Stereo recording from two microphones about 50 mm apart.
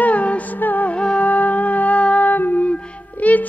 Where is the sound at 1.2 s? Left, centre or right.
Left.